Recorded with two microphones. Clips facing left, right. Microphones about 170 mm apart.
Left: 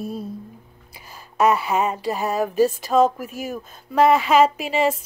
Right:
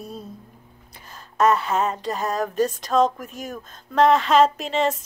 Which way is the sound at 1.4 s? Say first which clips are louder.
Left 1 dB; 10° left (ahead or behind).